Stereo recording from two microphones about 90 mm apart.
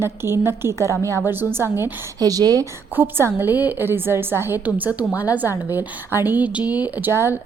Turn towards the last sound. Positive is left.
turn(degrees=-25)  # may be behind; listen again after turning